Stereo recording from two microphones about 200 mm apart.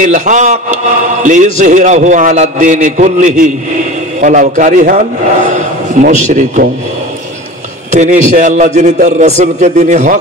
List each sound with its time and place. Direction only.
0.0 s a man's voice: 40° right (ahead or behind)
7.9 s a man's voice: 35° right (ahead or behind)